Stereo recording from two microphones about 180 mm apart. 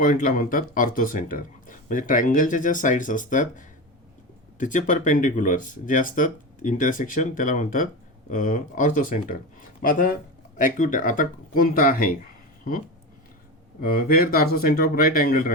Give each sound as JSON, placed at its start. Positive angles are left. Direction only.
{"t": 0.0, "sound": "speech", "side_deg": 50}
{"t": 13.8, "sound": "speech", "side_deg": 55}